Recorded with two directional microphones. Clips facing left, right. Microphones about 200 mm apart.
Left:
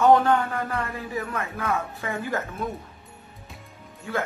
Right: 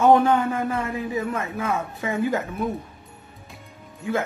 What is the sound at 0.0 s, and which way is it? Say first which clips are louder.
A man's voice: right 2 dB; 15° right (ahead or behind).